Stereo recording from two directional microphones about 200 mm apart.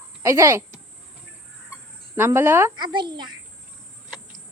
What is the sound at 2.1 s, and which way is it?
Speech, 10° right (ahead or behind).